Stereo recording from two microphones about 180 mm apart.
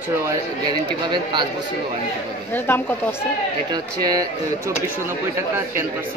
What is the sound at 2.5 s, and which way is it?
Speech, 10° left (ahead or behind).